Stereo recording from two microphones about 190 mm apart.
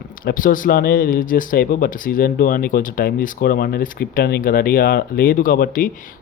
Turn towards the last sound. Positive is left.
turn(degrees=45)  # may be behind; listen again after turning